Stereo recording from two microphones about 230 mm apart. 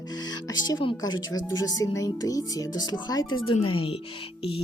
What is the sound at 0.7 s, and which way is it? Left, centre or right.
Speech, centre.